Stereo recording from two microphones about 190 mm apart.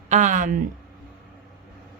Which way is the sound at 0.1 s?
40° right (ahead or behind).